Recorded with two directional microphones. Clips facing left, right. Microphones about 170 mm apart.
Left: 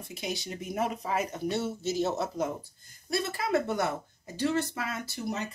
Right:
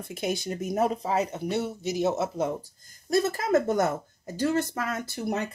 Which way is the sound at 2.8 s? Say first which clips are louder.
Right 8 dB; 45° right (ahead or behind).